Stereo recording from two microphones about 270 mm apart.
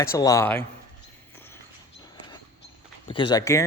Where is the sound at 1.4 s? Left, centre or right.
Centre.